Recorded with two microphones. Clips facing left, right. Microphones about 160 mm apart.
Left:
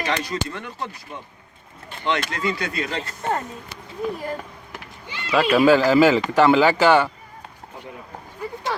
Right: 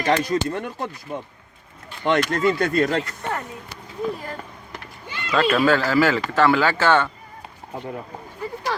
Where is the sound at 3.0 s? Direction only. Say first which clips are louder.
Left 3 dB; 25° left (ahead or behind).